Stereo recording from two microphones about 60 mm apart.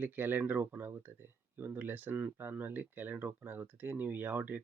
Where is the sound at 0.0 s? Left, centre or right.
Right.